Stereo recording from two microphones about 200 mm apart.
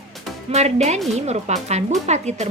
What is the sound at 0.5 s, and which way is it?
Speech, 35° right (ahead or behind).